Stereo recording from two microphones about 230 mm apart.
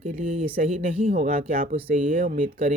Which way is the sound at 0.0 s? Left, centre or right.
Right.